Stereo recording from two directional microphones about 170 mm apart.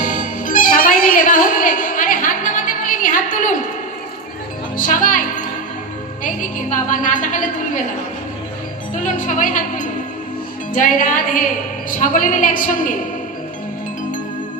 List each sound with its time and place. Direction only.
0.0 s music: 50° left (ahead or behind)
4.8 s music: 50° left (ahead or behind)
6.7 s a woman's voice: 50° left (ahead or behind)
9.0 s a woman's voice: 50° left (ahead or behind)